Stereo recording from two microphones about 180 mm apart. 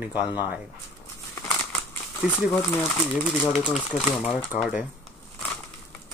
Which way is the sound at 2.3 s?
10° left (ahead or behind).